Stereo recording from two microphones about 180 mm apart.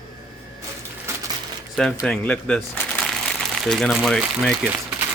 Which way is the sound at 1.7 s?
Centre (ahead or behind).